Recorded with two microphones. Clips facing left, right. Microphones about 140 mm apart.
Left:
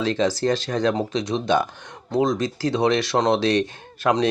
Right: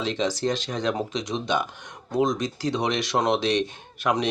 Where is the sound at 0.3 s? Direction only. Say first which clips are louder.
Left 4 dB; 35° left (ahead or behind).